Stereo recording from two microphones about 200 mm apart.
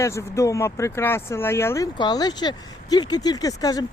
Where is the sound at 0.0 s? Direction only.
15° left (ahead or behind).